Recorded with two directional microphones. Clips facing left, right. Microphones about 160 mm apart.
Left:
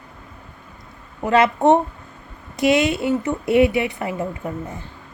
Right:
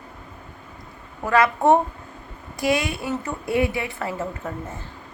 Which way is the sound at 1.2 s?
20° left (ahead or behind).